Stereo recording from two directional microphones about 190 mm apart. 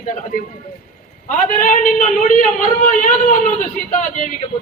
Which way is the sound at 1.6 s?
45° left (ahead or behind).